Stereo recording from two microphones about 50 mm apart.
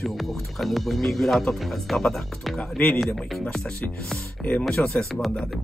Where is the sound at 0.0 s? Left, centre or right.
Centre.